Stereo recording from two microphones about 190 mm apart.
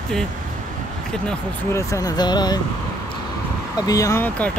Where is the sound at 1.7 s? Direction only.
15° left (ahead or behind).